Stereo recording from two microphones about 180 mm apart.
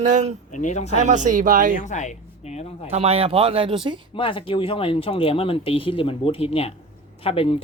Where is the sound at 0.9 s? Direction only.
40° right (ahead or behind).